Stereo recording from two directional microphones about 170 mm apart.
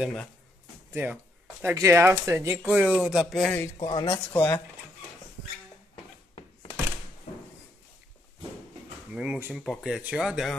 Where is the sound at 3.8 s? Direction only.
25° left (ahead or behind).